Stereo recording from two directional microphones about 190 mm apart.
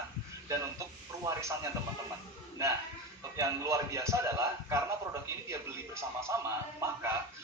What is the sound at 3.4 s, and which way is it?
A man's voice, 15° right (ahead or behind).